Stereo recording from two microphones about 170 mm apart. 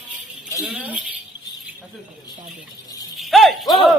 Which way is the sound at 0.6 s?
5° right (ahead or behind).